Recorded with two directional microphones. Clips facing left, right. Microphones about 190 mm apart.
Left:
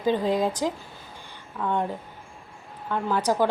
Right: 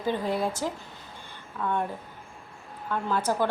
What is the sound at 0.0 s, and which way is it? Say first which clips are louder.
A woman's voice: left 4 dB; 20° left (ahead or behind).